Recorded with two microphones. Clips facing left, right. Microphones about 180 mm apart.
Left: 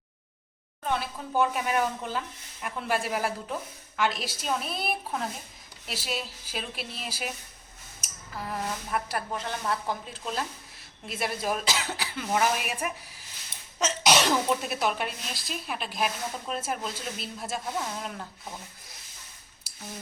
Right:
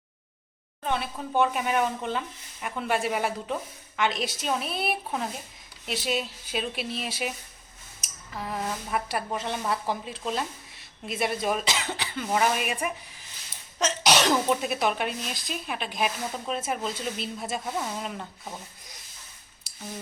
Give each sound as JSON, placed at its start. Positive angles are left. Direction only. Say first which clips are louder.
{"t": 0.9, "sound": "speech", "louder": "right 1 dB", "side_deg": 0}
{"t": 8.4, "sound": "speech", "louder": "right 1 dB", "side_deg": 0}